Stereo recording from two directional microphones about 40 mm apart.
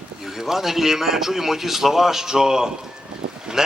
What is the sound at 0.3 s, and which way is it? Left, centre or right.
A man's voice, centre.